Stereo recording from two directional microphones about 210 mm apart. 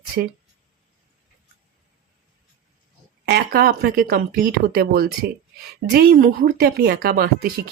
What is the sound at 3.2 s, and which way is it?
Speech, 50° right (ahead or behind).